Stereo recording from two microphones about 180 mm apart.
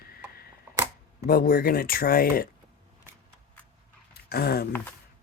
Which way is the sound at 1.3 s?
55° left (ahead or behind).